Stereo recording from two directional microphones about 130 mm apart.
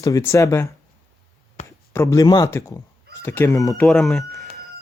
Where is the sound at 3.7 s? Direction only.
5° left (ahead or behind).